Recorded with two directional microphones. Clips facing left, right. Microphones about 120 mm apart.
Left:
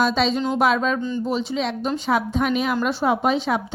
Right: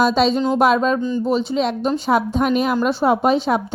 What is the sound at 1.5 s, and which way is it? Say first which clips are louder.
Speech: right 5 dB; 45° right (ahead or behind).